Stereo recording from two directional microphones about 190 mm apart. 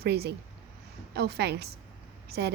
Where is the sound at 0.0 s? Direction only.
60° right (ahead or behind).